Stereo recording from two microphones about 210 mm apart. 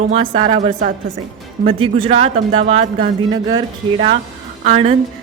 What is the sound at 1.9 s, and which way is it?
A woman's voice, 30° right (ahead or behind).